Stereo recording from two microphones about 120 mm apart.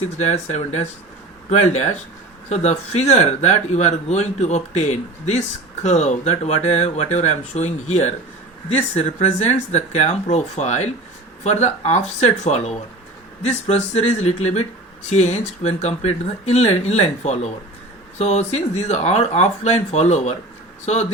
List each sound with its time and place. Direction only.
0.2 s speech: 70° left (ahead or behind)